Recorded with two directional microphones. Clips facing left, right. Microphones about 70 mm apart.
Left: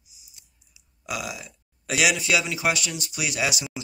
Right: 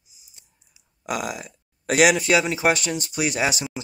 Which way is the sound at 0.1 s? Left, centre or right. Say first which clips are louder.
Right 1 dB; right.